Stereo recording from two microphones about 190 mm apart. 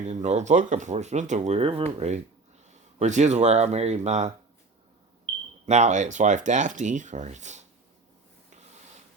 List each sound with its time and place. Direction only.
0.0 s speech: 35° right (ahead or behind)